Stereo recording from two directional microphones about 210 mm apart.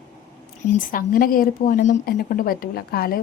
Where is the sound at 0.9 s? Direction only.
40° left (ahead or behind).